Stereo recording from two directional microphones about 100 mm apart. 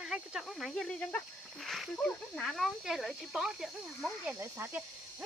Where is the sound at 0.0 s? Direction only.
5° right (ahead or behind).